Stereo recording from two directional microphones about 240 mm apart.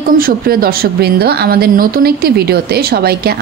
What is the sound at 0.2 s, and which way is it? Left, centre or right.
A woman's voice, right.